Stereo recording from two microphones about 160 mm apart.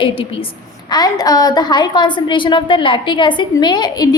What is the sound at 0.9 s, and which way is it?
A woman's voice, 25° left (ahead or behind).